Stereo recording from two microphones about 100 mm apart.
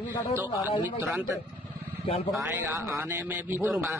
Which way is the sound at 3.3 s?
20° right (ahead or behind).